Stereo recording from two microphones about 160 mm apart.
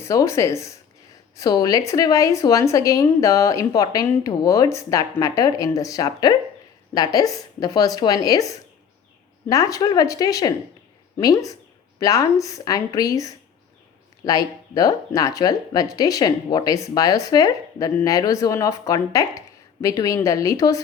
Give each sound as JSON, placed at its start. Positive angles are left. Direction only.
{"t": 0.0, "sound": "speech", "side_deg": 20}